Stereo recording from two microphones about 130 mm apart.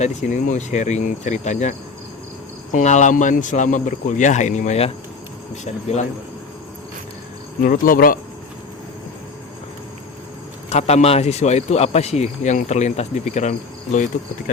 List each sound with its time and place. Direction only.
0.0 s speech: 70° left (ahead or behind)
2.7 s speech: 70° left (ahead or behind)
7.6 s speech: 90° left
10.7 s speech: 55° left (ahead or behind); by 14.5 s 75° left (ahead or behind)